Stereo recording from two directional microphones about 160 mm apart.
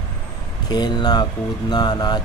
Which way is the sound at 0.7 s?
25° left (ahead or behind).